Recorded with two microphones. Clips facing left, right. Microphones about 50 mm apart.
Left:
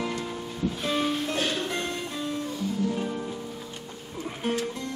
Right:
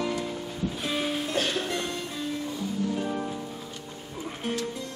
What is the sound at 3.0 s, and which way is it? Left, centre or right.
Music, centre.